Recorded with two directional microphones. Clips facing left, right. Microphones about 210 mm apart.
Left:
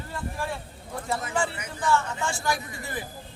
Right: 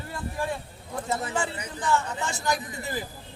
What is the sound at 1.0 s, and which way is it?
A woman's voice, 20° right (ahead or behind).